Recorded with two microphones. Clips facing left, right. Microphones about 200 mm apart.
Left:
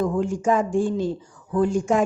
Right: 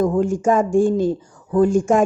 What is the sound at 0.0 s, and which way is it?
A woman's voice, 45° right (ahead or behind).